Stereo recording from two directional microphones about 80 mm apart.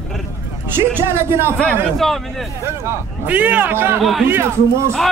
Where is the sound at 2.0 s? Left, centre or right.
Centre.